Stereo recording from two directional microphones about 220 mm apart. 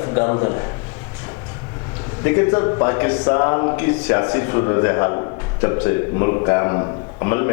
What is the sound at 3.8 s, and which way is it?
A man's voice, 15° left (ahead or behind).